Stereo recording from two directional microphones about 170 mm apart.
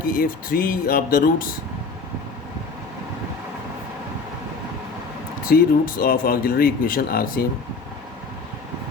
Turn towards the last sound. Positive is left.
turn(degrees=60)  # may be behind; listen again after turning